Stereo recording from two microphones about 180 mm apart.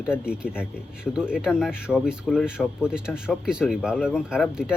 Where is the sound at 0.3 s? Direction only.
5° right (ahead or behind).